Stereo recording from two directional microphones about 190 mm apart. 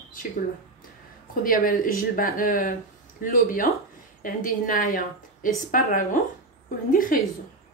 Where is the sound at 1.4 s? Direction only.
45° left (ahead or behind).